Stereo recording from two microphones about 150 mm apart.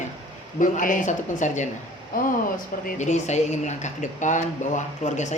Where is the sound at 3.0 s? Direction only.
50° left (ahead or behind).